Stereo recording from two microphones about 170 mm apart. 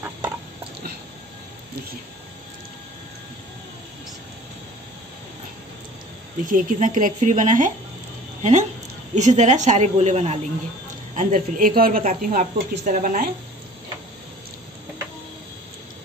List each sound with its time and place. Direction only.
6.4 s a woman's voice: 50° right (ahead or behind)
11.1 s a woman's voice: 50° right (ahead or behind)